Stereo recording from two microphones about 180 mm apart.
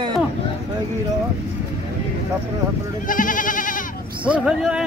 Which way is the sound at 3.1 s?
45° left (ahead or behind).